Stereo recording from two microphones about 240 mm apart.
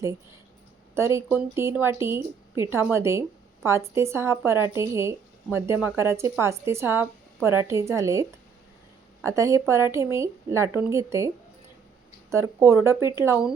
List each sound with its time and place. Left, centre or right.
0.9 s speech: centre
12.3 s speech: centre